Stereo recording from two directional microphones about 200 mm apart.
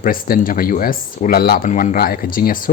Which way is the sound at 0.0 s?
45° left (ahead or behind).